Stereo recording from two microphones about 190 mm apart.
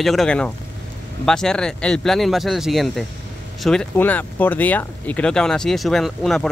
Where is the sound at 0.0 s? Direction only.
Centre (ahead or behind).